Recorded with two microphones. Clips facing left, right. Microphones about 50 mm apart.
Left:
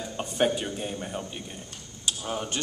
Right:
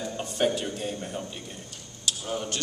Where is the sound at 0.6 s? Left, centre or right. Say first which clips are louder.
Even; centre.